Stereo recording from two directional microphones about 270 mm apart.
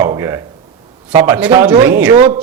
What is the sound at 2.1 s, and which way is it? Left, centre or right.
Speech, right.